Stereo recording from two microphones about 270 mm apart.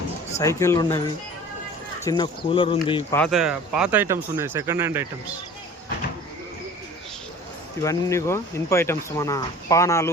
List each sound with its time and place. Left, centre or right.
0.3 s speech: centre
2.0 s speech: centre
3.2 s speech: centre
7.8 s speech: centre